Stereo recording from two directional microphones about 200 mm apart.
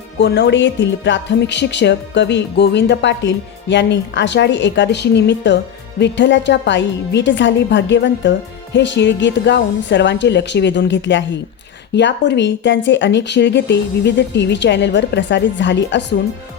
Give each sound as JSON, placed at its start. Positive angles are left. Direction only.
{"t": 0.2, "sound": "speech", "side_deg": 60}